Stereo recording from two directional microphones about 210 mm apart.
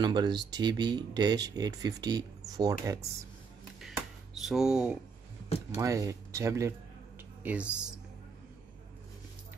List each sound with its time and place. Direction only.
0.0 s speech: 20° right (ahead or behind)
3.8 s a sound: centre (ahead or behind)
5.8 s speech: 15° right (ahead or behind)